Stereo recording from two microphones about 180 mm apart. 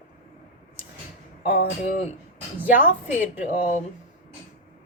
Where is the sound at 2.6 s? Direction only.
10° right (ahead or behind).